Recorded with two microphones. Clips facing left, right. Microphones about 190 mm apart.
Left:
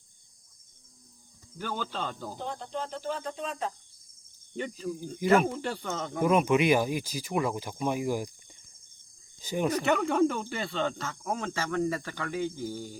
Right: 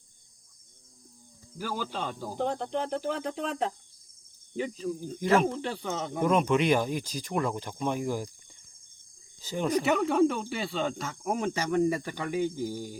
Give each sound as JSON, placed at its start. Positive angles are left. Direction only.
{"t": 1.5, "sound": "speech", "side_deg": -5}
{"t": 2.6, "sound": "cricket", "side_deg": -65}
{"t": 4.5, "sound": "speech", "side_deg": 0}
{"t": 9.4, "sound": "speech", "side_deg": 15}
{"t": 9.7, "sound": "speech", "side_deg": -5}